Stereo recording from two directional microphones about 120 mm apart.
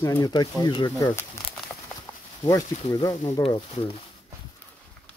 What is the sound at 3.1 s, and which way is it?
Speech, 65° left (ahead or behind).